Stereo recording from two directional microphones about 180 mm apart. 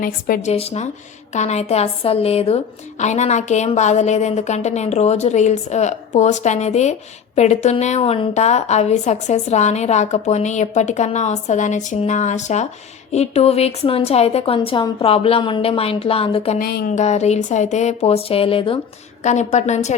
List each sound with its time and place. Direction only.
0.0 s speech: 50° left (ahead or behind)
0.5 s a woman's voice: 35° left (ahead or behind)
16.6 s speech: 55° left (ahead or behind)
16.9 s a woman's voice: 40° left (ahead or behind)